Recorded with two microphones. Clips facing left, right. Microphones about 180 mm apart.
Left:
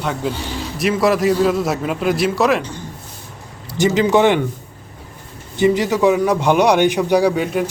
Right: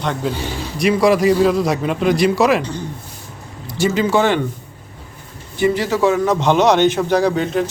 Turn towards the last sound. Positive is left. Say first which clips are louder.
# even
turn(degrees=10)  # may be behind; listen again after turning